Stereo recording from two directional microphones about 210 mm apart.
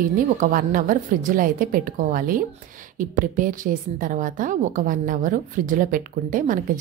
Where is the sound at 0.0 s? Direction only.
40° right (ahead or behind).